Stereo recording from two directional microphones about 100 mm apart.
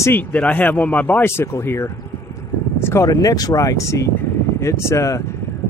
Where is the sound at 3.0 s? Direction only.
40° left (ahead or behind).